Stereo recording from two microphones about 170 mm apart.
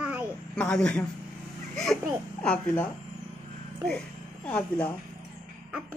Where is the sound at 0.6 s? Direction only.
5° left (ahead or behind).